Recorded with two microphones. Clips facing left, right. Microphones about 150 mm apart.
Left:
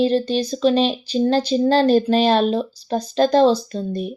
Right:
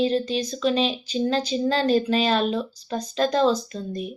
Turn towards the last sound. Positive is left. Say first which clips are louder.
# left 6 dB
turn(degrees=30)  # may be behind; listen again after turning